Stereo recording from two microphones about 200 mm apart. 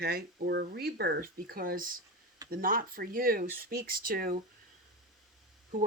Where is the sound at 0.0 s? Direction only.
50° right (ahead or behind).